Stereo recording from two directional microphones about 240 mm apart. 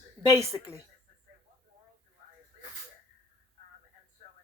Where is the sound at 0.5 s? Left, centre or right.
Centre.